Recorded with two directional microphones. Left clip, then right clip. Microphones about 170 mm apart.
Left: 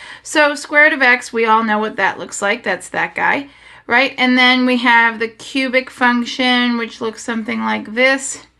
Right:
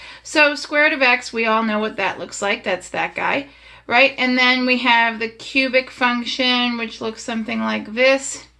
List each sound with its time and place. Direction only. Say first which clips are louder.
0.3 s speech: left 3 dB; 45° left (ahead or behind)